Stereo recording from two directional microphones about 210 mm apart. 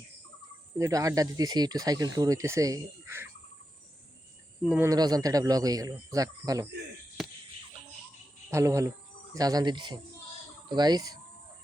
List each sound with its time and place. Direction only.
0.8 s speech: 15° right (ahead or behind)
4.6 s speech: 5° right (ahead or behind)
4.9 s speech: 15° right (ahead or behind)
8.4 s speech: 15° right (ahead or behind)